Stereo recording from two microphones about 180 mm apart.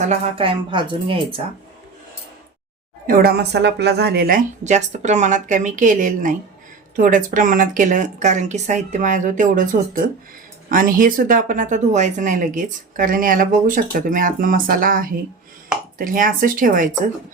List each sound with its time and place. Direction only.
0.1 s speech: 30° right (ahead or behind)
3.1 s speech: 55° right (ahead or behind)